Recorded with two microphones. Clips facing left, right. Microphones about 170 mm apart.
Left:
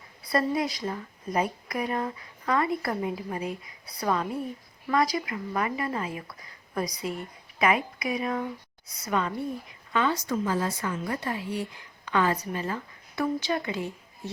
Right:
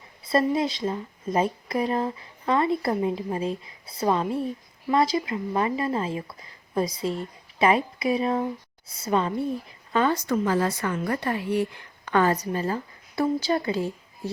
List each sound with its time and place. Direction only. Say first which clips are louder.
0.3 s speech: right 4 dB; 25° right (ahead or behind)
9.9 s a woman's voice: right 4 dB; 45° right (ahead or behind)
12.0 s a woman's voice: right 4 dB; 45° right (ahead or behind)